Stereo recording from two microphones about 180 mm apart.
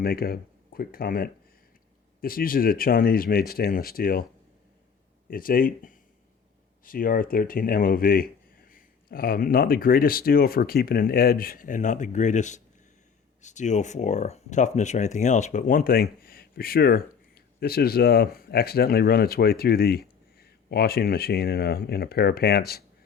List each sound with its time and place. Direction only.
0.0 s speech: 55° left (ahead or behind)
5.3 s speech: 50° left (ahead or behind)